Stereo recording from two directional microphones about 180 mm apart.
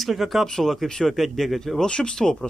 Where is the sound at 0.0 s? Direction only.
Centre (ahead or behind).